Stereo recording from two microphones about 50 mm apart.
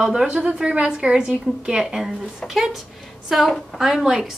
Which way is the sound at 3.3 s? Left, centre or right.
Centre.